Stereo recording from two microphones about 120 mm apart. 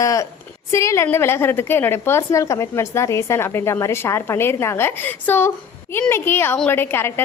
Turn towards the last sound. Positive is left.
turn(degrees=20)  # may be behind; listen again after turning